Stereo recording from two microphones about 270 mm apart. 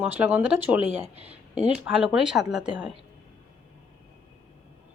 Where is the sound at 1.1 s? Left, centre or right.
Right.